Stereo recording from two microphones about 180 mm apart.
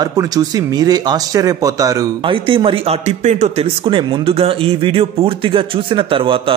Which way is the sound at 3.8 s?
30° right (ahead or behind).